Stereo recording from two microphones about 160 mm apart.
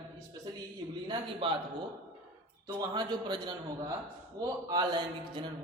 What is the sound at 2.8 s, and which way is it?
Speech, 25° right (ahead or behind).